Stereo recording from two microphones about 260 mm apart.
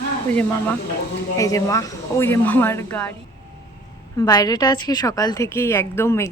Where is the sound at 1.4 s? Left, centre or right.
Centre.